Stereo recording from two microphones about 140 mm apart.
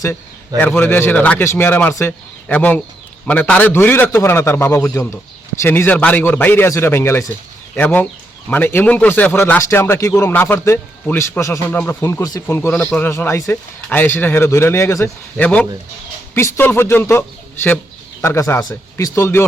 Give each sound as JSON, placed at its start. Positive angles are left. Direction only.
{"t": 0.0, "sound": "speech", "side_deg": 20}